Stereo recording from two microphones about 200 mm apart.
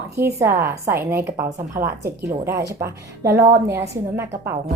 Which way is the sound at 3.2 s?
15° right (ahead or behind).